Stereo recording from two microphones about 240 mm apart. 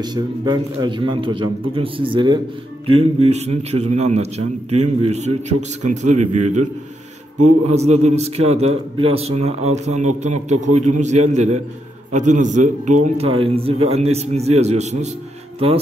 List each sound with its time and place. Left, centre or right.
0.0 s a man's voice: centre